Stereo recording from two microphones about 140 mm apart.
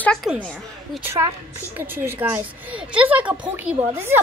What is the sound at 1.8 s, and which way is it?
A woman's voice, 15° right (ahead or behind).